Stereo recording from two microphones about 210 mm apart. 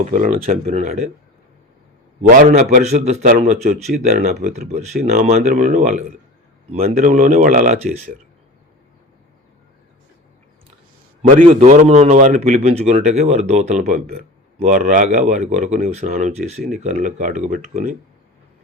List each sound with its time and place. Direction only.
0.0 s a man's voice: 40° right (ahead or behind)
2.2 s a man's voice: 45° right (ahead or behind)
11.2 s a man's voice: 35° right (ahead or behind)